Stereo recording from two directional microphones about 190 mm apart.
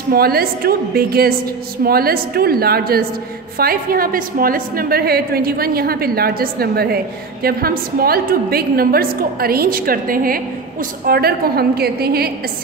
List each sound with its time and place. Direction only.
0.1 s a woman's voice: 55° right (ahead or behind)